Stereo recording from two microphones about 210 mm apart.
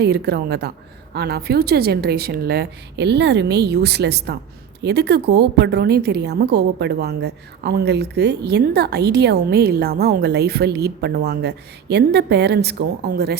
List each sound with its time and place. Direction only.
0.0 s a woman's voice: 50° right (ahead or behind)